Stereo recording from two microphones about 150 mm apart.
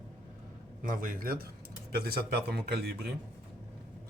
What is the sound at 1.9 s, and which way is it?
Speech, 90° right.